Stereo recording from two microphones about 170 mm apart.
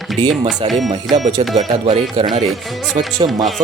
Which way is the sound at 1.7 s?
35° right (ahead or behind).